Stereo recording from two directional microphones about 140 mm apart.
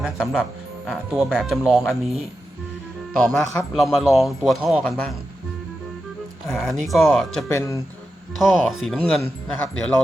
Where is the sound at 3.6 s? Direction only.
Centre (ahead or behind).